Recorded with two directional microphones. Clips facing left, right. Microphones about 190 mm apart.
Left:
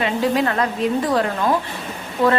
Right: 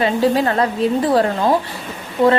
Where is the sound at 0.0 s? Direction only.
35° right (ahead or behind).